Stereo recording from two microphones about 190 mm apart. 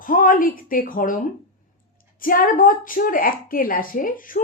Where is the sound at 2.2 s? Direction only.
45° left (ahead or behind).